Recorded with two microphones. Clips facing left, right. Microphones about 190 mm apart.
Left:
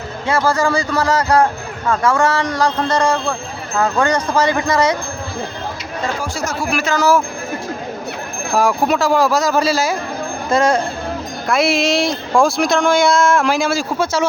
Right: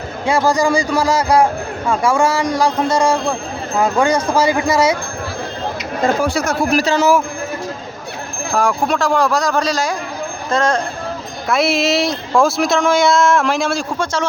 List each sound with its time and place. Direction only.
0.3 s speech: 15° right (ahead or behind)
6.2 s speech: 60° right (ahead or behind)
6.7 s speech: 35° right (ahead or behind)
8.5 s speech: 5° left (ahead or behind)